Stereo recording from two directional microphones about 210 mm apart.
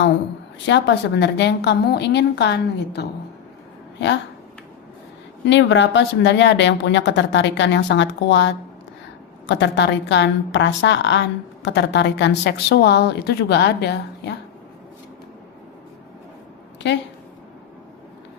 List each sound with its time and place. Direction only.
0.6 s a woman's voice: 55° left (ahead or behind)
5.5 s a woman's voice: 60° left (ahead or behind)
16.8 s a woman's voice: 60° left (ahead or behind)